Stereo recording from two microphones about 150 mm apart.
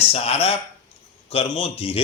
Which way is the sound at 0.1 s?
40° left (ahead or behind).